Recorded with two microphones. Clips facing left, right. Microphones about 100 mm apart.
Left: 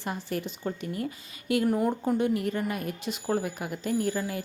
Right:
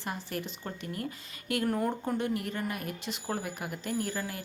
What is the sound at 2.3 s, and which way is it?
A woman's voice, 25° left (ahead or behind).